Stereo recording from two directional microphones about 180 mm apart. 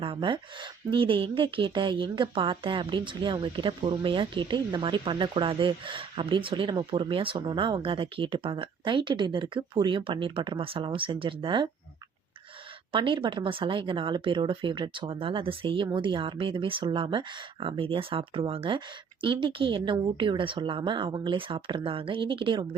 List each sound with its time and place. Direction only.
0.0 s speech: 30° right (ahead or behind)
12.9 s speech: 25° right (ahead or behind)